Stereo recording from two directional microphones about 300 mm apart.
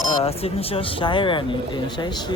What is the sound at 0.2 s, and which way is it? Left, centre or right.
Speech, centre.